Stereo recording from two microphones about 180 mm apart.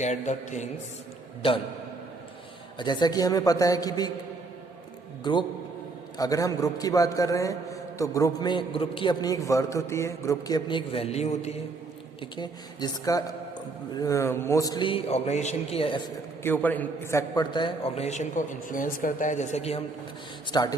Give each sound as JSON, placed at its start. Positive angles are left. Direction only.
{"t": 0.0, "sound": "a man's voice", "side_deg": 40}
{"t": 1.4, "sound": "a man's voice", "side_deg": 30}
{"t": 2.7, "sound": "a man's voice", "side_deg": 25}
{"t": 5.2, "sound": "a man's voice", "side_deg": 25}
{"t": 12.2, "sound": "a man's voice", "side_deg": 25}
{"t": 16.4, "sound": "a man's voice", "side_deg": 10}
{"t": 20.5, "sound": "a man's voice", "side_deg": 20}